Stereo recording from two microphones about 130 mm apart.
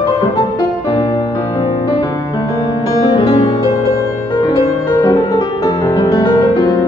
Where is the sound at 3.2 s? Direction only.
50° left (ahead or behind).